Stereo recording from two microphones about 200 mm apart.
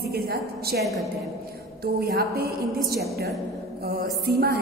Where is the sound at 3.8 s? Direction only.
50° right (ahead or behind).